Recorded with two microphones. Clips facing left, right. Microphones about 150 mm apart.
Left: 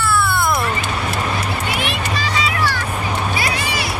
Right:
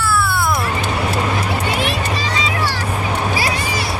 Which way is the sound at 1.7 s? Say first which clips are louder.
Right 2 dB; 35° right (ahead or behind).